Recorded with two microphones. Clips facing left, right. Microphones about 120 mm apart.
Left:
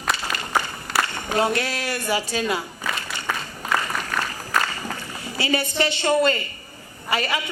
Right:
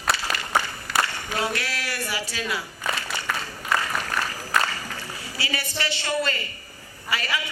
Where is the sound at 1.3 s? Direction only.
20° left (ahead or behind).